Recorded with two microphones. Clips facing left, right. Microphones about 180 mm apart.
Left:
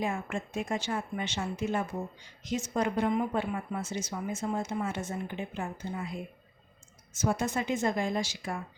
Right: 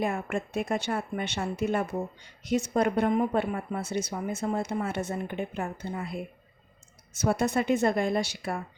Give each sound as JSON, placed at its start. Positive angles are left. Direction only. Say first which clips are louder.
{"t": 0.0, "sound": "a woman's voice", "louder": "right 3 dB", "side_deg": -60}